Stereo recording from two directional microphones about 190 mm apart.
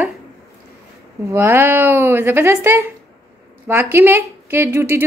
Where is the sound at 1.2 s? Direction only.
15° right (ahead or behind).